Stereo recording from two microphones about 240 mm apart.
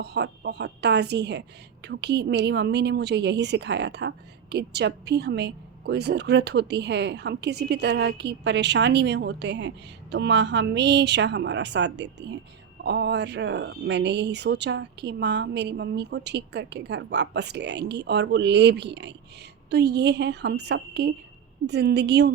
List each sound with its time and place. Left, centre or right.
0.0 s a woman's voice: right